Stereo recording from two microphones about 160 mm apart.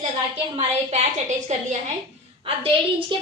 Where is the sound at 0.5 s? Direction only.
45° right (ahead or behind).